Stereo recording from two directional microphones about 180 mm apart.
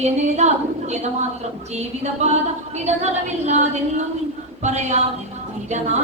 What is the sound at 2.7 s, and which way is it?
Speech, 40° right (ahead or behind).